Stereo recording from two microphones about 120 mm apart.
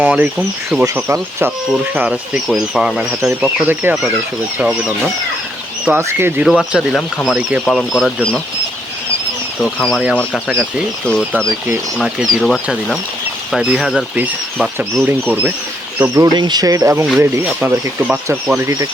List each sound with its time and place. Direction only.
0.0 s speech: 10° right (ahead or behind)
6.0 s speech: 20° right (ahead or behind)
6.4 s speech: 5° right (ahead or behind)
7.6 s speech: centre (ahead or behind)
9.6 s speech: 5° left (ahead or behind)
11.0 s speech: 10° left (ahead or behind); by 15.5 s 15° right (ahead or behind)
16.1 s speech: 35° right (ahead or behind)
17.2 s speech: 15° right (ahead or behind)